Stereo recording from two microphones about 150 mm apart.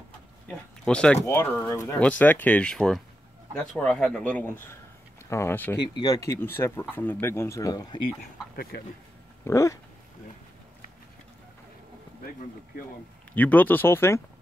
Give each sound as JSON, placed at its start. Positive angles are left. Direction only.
{"t": 0.8, "sound": "speech", "side_deg": 5}
{"t": 1.2, "sound": "speech", "side_deg": 15}
{"t": 5.8, "sound": "speech", "side_deg": 25}
{"t": 8.7, "sound": "speech", "side_deg": 90}
{"t": 9.4, "sound": "dog", "side_deg": 20}
{"t": 13.3, "sound": "speech", "side_deg": 10}